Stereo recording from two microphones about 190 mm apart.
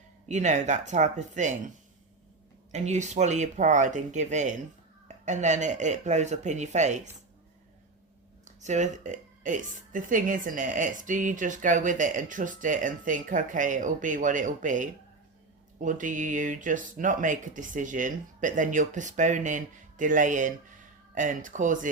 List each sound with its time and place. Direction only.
0.3 s speech: 40° right (ahead or behind)
2.7 s speech: 35° right (ahead or behind)
8.4 s a woman's voice: 40° right (ahead or behind)